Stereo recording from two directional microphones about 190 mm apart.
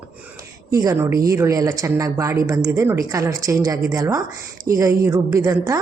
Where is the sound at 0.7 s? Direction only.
20° right (ahead or behind).